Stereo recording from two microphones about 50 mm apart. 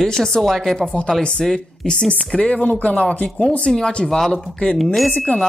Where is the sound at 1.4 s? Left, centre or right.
Centre.